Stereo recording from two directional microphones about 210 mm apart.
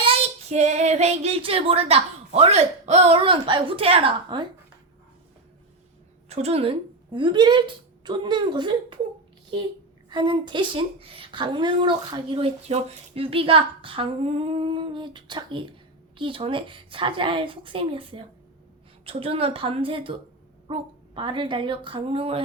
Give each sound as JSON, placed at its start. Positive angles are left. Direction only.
{"t": 0.0, "sound": "child singing", "side_deg": -30}
{"t": 6.2, "sound": "a woman's voice", "side_deg": -30}
{"t": 10.1, "sound": "a woman's voice", "side_deg": -20}